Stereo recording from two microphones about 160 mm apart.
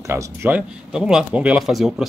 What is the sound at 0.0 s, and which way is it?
Speech, 15° right (ahead or behind).